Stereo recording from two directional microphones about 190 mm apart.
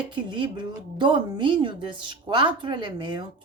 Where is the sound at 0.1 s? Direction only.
25° right (ahead or behind).